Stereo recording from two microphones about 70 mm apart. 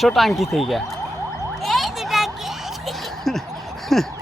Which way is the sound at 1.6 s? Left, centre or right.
Centre.